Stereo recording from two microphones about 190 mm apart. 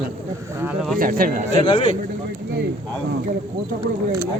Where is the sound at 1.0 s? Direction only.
45° right (ahead or behind).